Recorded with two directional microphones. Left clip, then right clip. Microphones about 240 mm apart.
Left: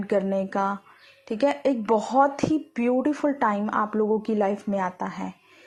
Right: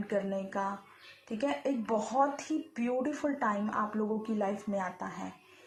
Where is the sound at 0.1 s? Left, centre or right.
Left.